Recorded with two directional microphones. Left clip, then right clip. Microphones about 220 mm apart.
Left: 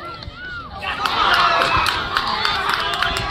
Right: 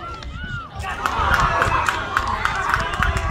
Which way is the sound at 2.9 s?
45° left (ahead or behind).